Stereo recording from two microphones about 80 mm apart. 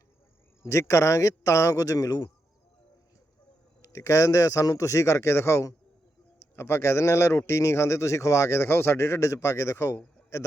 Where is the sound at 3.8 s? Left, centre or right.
Left.